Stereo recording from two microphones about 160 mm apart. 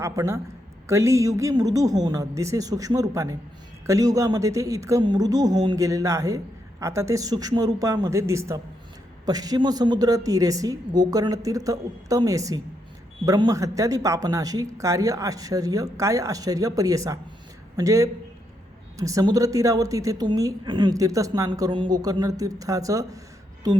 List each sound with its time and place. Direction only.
0.0 s a woman's voice: 15° right (ahead or behind)